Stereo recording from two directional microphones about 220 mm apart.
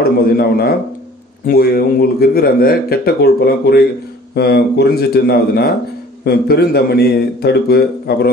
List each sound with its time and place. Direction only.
0.0 s a man's voice: 45° left (ahead or behind)